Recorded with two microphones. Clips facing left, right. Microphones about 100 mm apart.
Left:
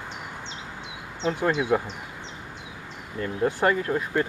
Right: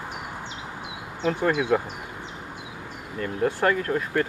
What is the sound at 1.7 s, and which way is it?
Insect, 25° left (ahead or behind).